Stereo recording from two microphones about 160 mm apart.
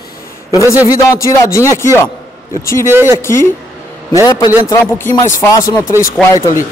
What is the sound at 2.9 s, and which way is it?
Speech, 15° right (ahead or behind).